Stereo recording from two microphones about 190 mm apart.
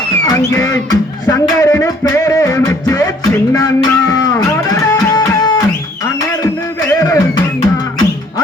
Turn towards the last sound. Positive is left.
turn(degrees=20)  # may be behind; listen again after turning